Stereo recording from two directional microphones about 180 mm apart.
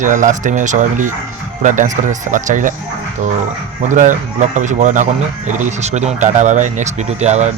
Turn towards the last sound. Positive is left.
turn(degrees=-40)  # may be behind; listen again after turning